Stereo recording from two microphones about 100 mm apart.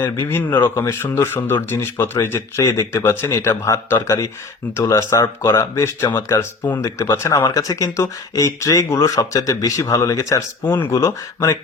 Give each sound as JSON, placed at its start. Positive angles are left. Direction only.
{"t": 0.0, "sound": "speech", "side_deg": 20}